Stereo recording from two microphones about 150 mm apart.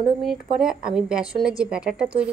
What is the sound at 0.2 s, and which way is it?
A woman's voice, 5° right (ahead or behind).